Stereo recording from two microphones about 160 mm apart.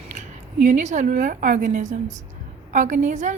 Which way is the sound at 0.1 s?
50° right (ahead or behind).